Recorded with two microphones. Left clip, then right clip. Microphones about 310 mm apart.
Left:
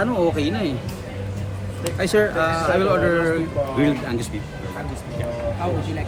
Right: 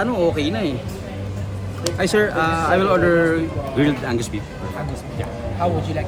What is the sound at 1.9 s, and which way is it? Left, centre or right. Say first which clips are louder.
Speech: right 1 dB; centre.